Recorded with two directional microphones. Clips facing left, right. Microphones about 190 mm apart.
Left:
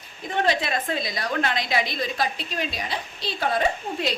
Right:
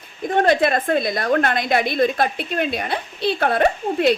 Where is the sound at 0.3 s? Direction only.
50° right (ahead or behind).